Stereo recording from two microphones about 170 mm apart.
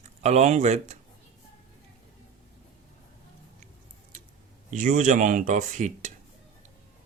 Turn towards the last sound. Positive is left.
turn(degrees=-45)  # may be behind; listen again after turning